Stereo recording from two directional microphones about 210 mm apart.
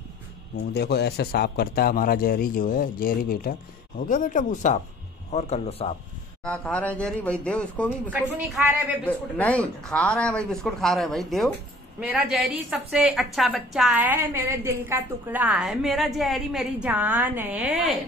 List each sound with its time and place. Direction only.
0.7 s a man's voice: 50° left (ahead or behind)
4.1 s chopping: 40° left (ahead or behind)
5.3 s a man's voice: 30° left (ahead or behind)
6.4 s a woman's voice: 5° left (ahead or behind)
8.1 s a woman's voice: 5° right (ahead or behind)
9.0 s a woman's voice: 5° left (ahead or behind)